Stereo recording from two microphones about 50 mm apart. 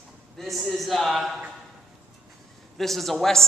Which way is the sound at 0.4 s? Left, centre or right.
Centre.